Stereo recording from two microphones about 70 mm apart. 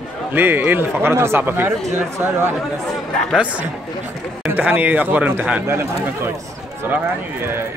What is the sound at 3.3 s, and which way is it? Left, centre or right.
Speech, centre.